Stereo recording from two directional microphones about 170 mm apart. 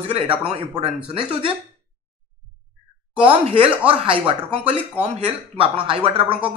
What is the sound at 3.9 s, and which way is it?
A man's voice, 30° right (ahead or behind).